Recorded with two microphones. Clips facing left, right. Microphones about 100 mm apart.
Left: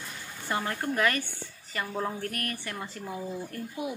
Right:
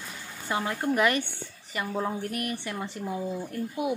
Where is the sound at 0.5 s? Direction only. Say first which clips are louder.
Right 3 dB; 15° right (ahead or behind).